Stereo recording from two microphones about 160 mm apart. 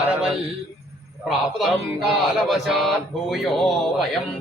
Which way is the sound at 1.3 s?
Centre (ahead or behind).